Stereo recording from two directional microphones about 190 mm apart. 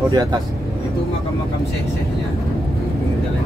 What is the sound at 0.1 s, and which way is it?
Speech, 20° right (ahead or behind).